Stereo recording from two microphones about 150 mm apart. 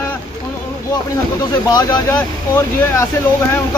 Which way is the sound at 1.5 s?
30° left (ahead or behind).